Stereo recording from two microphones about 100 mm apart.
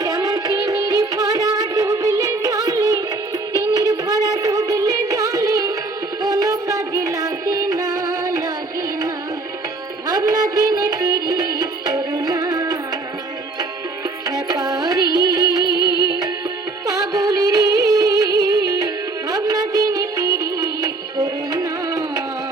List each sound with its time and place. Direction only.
0.0 s music: 35° right (ahead or behind)
10.1 s music: 40° right (ahead or behind)
14.3 s music: 40° right (ahead or behind)
16.8 s music: 35° right (ahead or behind)